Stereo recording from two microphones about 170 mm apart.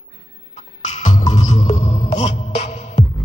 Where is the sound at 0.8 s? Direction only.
45° left (ahead or behind).